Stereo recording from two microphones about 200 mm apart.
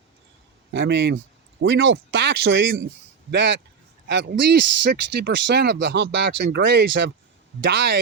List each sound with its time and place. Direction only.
0.7 s speech: 60° right (ahead or behind)